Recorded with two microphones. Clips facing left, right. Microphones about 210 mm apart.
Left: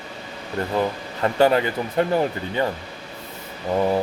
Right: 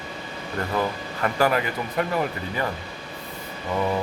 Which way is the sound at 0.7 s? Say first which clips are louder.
Left 3 dB; 25° left (ahead or behind).